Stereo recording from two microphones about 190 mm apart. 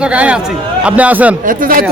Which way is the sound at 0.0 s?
5° right (ahead or behind).